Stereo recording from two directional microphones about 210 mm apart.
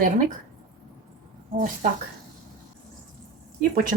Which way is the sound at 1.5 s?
40° right (ahead or behind).